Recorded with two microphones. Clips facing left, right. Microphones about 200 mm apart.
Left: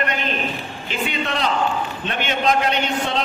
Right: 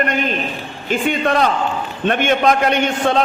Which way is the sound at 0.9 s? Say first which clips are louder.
Right 8 dB; 50° right (ahead or behind).